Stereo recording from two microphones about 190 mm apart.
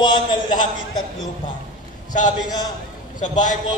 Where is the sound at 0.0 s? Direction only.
25° left (ahead or behind).